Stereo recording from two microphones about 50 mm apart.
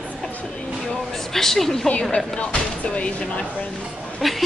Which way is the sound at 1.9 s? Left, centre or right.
Left.